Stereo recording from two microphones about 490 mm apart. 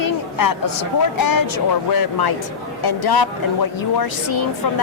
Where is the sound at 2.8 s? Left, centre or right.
Left.